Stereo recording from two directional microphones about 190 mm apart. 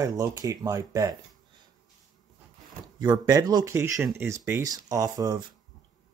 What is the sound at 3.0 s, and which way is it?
Speech, 20° right (ahead or behind).